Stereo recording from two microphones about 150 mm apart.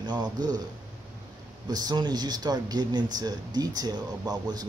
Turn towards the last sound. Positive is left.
turn(degrees=-25)  # may be behind; listen again after turning